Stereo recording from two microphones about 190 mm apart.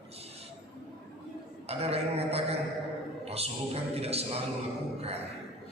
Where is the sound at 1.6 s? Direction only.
30° right (ahead or behind).